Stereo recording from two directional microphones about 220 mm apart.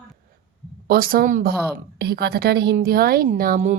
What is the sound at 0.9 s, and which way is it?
A woman's voice, 40° right (ahead or behind).